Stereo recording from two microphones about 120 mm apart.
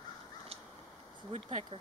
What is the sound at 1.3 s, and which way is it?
Speech, 80° right.